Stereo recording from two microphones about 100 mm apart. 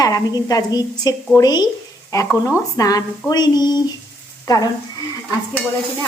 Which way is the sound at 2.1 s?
30° left (ahead or behind).